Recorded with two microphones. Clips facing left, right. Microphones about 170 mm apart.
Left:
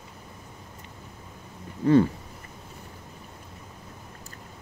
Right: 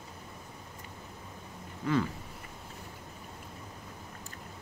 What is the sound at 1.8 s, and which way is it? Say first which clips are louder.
Speech: left 11 dB; 30° left (ahead or behind).